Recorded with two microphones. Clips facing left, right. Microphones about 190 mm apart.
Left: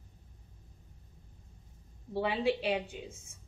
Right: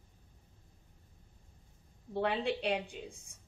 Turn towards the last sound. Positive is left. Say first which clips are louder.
# left 1 dB
turn(degrees=0)  # may be behind; listen again after turning